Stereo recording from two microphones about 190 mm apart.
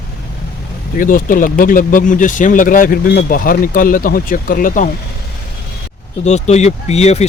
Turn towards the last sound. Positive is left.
turn(degrees=35)  # may be behind; listen again after turning